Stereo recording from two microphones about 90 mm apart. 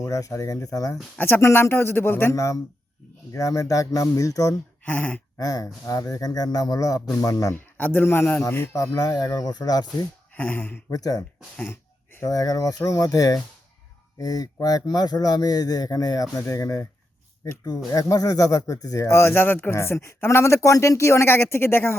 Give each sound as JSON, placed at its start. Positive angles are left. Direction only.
{"t": 0.0, "sound": "speech", "side_deg": 40}
{"t": 1.2, "sound": "speech", "side_deg": 25}
{"t": 2.3, "sound": "speech", "side_deg": 35}
{"t": 4.8, "sound": "a sound", "side_deg": 15}
{"t": 5.4, "sound": "speech", "side_deg": 40}
{"t": 7.5, "sound": "speech", "side_deg": 20}
{"t": 10.3, "sound": "speech", "side_deg": 20}
{"t": 10.8, "sound": "speech", "side_deg": 45}
{"t": 12.3, "sound": "speech", "side_deg": 45}